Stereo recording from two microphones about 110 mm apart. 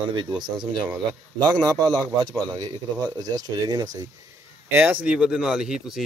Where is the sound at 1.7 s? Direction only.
15° left (ahead or behind).